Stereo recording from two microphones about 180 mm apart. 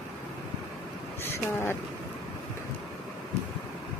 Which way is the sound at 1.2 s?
15° left (ahead or behind).